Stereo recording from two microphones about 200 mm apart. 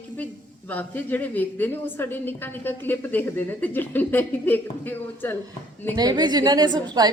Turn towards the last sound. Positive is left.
turn(degrees=-20)  # may be behind; listen again after turning